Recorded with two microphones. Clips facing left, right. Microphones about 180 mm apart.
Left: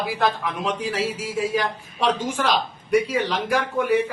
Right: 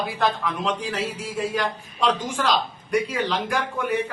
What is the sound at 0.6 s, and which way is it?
A man's voice, 10° left (ahead or behind).